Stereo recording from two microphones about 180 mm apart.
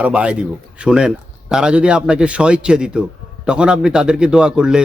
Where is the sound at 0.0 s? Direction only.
5° right (ahead or behind).